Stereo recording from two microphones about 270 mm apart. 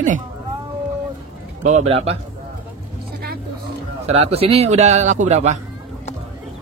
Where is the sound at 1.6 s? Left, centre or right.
Right.